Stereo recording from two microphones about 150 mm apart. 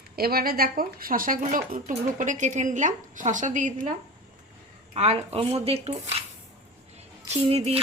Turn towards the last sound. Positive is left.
turn(degrees=-40)  # may be behind; listen again after turning